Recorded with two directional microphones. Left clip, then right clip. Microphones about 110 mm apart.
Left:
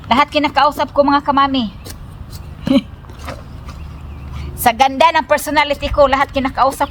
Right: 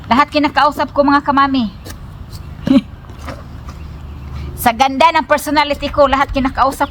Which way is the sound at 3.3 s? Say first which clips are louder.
Even; centre (ahead or behind).